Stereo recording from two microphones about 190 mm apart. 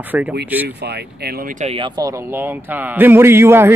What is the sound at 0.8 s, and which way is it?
Speech, 60° right (ahead or behind).